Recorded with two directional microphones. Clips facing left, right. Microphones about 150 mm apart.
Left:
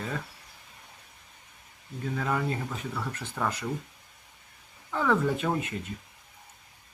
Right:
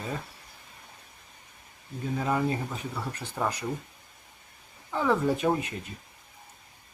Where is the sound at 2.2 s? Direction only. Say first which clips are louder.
Right 3 dB; 20° right (ahead or behind).